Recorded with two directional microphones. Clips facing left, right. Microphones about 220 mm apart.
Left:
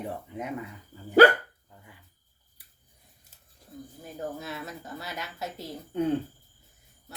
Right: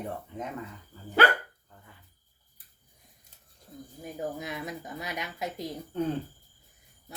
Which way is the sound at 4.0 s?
15° right (ahead or behind).